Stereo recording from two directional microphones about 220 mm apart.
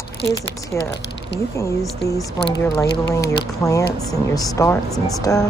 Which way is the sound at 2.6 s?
15° left (ahead or behind).